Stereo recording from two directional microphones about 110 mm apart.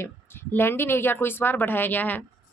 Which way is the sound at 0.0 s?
20° left (ahead or behind).